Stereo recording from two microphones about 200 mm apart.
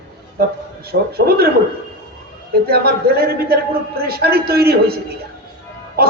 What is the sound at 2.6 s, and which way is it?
A man's voice, 50° right (ahead or behind).